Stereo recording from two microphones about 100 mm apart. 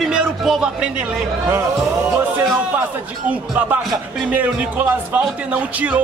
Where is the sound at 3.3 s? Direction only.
15° right (ahead or behind).